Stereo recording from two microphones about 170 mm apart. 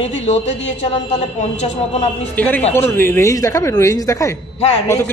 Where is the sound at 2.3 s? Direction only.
10° left (ahead or behind).